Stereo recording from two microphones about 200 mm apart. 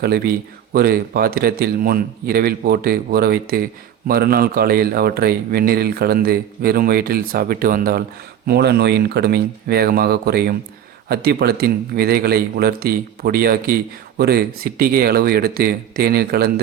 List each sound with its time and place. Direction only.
0.0 s speech: 50° right (ahead or behind)